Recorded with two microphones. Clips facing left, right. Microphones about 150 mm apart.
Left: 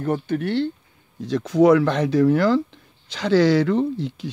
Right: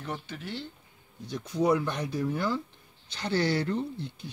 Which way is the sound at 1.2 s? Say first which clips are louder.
Left 11 dB; 90° left.